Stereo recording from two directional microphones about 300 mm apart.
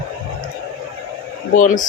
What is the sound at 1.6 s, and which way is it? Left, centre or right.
Speech, left.